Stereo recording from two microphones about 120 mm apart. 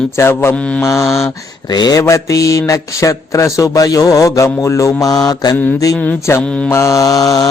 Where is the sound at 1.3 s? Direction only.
30° left (ahead or behind).